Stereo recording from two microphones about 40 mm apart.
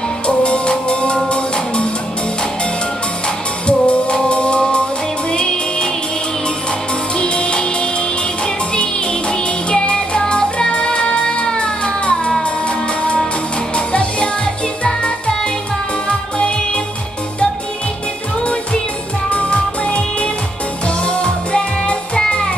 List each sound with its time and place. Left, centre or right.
0.3 s music: left
3.6 s music: left
7.2 s music: left
19.3 s music: left